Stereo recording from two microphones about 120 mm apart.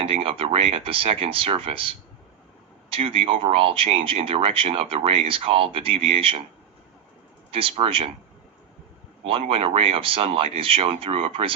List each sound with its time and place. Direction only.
0.0 s speech: 50° right (ahead or behind)
7.6 s speech: 50° right (ahead or behind)
9.5 s speech: 50° right (ahead or behind)